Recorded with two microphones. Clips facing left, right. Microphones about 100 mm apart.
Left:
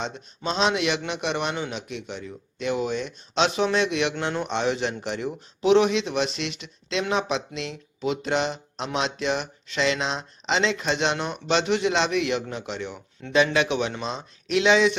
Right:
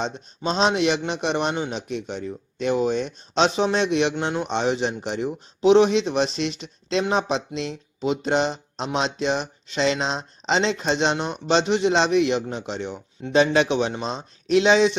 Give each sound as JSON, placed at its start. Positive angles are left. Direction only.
{"t": 0.0, "sound": "speech", "side_deg": -35}
{"t": 4.1, "sound": "a man's voice", "side_deg": -15}